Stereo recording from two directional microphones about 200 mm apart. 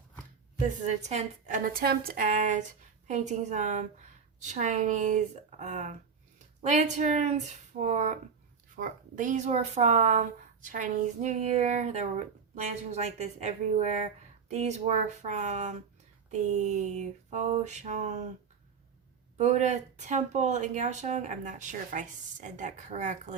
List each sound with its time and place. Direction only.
0.9 s speech: 35° right (ahead or behind)
19.4 s speech: 35° right (ahead or behind)